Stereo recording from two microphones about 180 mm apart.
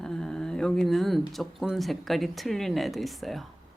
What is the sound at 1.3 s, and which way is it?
Speech, centre (ahead or behind).